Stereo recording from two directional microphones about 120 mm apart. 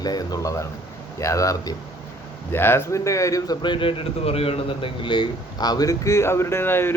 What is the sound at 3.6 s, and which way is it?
A man's voice, 45° left (ahead or behind).